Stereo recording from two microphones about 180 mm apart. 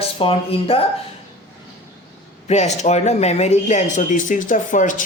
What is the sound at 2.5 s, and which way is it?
Speech, 40° left (ahead or behind).